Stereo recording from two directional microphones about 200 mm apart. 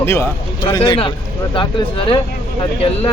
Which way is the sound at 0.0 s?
10° left (ahead or behind).